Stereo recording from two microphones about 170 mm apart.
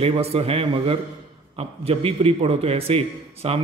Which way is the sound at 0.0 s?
35° right (ahead or behind).